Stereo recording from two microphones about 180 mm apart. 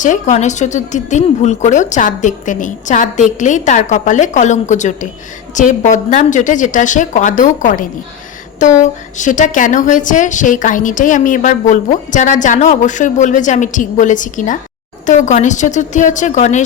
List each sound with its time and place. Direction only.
0.0 s a woman's voice: 45° left (ahead or behind)